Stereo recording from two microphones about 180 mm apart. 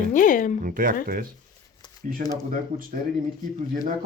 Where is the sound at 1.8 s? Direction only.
20° left (ahead or behind).